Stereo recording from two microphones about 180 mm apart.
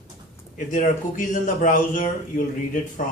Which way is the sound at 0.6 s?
45° left (ahead or behind).